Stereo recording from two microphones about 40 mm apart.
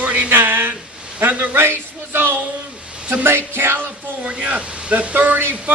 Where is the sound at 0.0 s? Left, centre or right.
Right.